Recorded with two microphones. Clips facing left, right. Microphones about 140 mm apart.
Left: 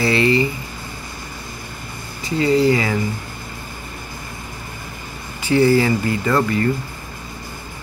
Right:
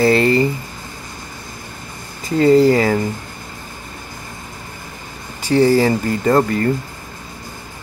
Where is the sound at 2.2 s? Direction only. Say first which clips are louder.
Right 5 dB; 45° right (ahead or behind).